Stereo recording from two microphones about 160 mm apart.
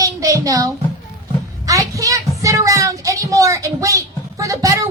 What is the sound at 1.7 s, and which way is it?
Child singing, 20° right (ahead or behind).